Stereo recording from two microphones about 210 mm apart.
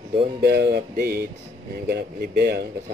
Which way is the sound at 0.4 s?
50° right (ahead or behind).